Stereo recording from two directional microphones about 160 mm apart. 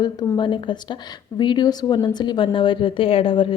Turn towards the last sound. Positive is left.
turn(degrees=35)  # may be behind; listen again after turning